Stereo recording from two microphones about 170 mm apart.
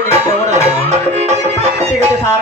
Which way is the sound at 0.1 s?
40° right (ahead or behind).